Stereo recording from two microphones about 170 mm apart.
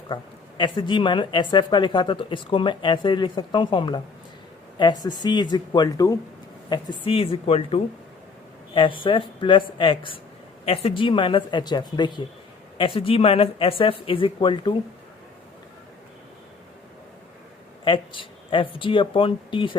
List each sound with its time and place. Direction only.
0.1 s speech: 30° left (ahead or behind)
17.8 s speech: 30° left (ahead or behind)